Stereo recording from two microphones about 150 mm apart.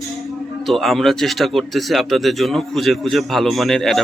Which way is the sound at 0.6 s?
Centre (ahead or behind).